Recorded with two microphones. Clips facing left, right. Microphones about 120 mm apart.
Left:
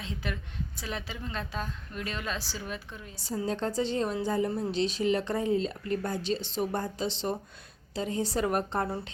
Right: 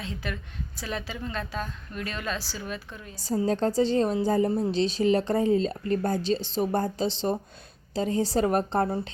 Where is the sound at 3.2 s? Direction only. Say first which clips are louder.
Right 6 dB; 40° right (ahead or behind).